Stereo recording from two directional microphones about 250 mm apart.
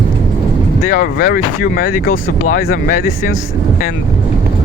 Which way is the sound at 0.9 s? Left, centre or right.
Left.